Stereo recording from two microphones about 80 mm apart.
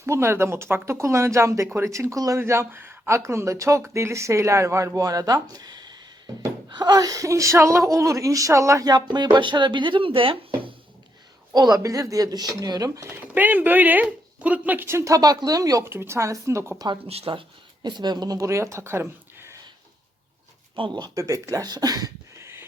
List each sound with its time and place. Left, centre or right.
0.0 s speech: right
2.4 s a woman's voice: right
8.9 s speech: right
11.5 s speech: right
11.8 s a woman's voice: right
13.1 s a woman's voice: right
15.8 s speech: right
16.7 s speech: right
17.8 s speech: right
18.3 s speech: right
20.7 s speech: right
21.2 s a woman's voice: right
22.4 s a sound: right